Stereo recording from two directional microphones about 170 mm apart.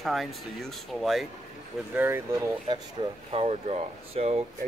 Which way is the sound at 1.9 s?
15° right (ahead or behind).